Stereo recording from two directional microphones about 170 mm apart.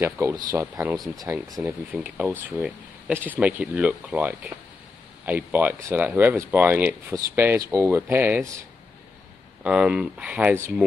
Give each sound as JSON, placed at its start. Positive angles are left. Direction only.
{"t": 0.0, "sound": "speech", "side_deg": -15}
{"t": 0.7, "sound": "speech", "side_deg": 0}
{"t": 1.1, "sound": "speech", "side_deg": -20}
{"t": 1.7, "sound": "speech", "side_deg": -10}
{"t": 9.6, "sound": "speech", "side_deg": -5}